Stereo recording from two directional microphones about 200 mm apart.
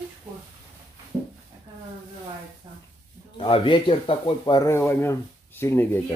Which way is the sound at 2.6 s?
20° right (ahead or behind).